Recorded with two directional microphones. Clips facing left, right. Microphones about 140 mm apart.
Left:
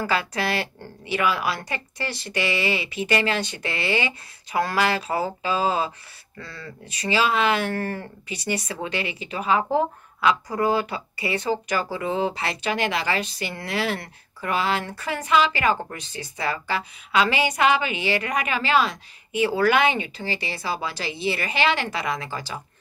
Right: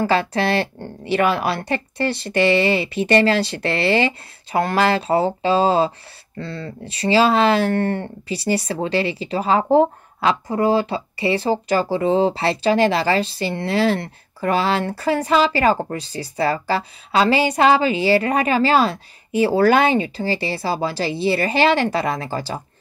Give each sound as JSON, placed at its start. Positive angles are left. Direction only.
{"t": 0.0, "sound": "speech", "side_deg": -30}